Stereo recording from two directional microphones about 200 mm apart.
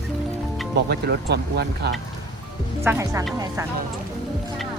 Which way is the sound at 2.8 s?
15° right (ahead or behind).